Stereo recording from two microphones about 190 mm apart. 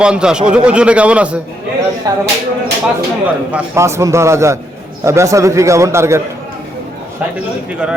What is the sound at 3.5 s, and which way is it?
A man's voice, 15° right (ahead or behind).